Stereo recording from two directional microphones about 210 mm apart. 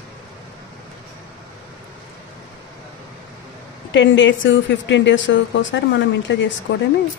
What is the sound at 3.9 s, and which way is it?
Speech, 60° left (ahead or behind).